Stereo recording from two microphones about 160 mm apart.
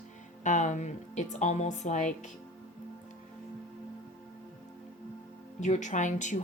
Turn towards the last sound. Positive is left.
turn(degrees=50)  # may be behind; listen again after turning